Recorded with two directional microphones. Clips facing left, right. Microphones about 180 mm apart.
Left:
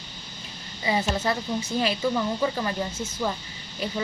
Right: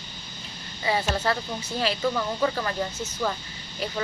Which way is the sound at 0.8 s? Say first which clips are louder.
Even; 20° left (ahead or behind).